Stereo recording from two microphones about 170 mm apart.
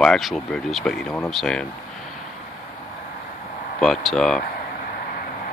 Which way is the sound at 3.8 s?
Centre (ahead or behind).